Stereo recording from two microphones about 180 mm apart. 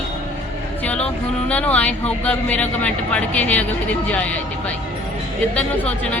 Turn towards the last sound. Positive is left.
turn(degrees=10)  # may be behind; listen again after turning